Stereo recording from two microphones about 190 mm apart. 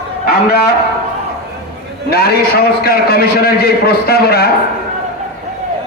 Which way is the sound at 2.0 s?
55° left (ahead or behind).